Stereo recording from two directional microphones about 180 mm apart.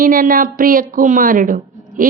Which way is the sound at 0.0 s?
50° right (ahead or behind).